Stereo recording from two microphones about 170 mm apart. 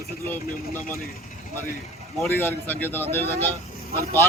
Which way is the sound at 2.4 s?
10° left (ahead or behind).